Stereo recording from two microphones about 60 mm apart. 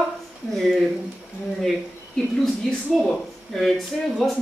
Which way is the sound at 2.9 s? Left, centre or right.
Centre.